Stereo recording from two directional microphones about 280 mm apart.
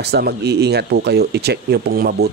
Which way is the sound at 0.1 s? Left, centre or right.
Right.